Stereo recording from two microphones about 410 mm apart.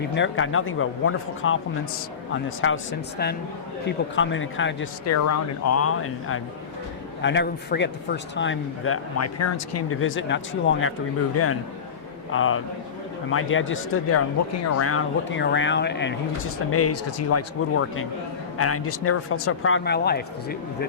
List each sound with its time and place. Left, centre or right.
0.1 s a man's voice: left
12.3 s speech: left